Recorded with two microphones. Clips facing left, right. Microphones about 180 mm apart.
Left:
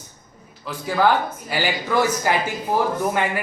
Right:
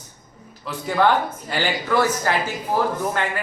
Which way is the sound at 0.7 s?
Centre (ahead or behind).